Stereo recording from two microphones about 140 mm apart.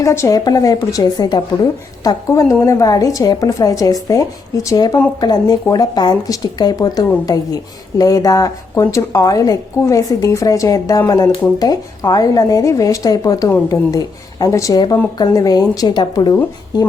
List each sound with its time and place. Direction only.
0.0 s a woman's voice: 20° left (ahead or behind)